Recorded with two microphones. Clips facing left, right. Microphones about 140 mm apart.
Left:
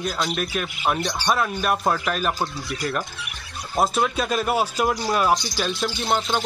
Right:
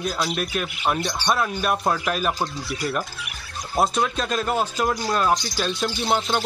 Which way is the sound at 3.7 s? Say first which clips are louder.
Even; centre (ahead or behind).